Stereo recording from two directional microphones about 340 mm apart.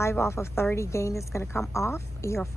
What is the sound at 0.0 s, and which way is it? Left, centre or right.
Speech, centre.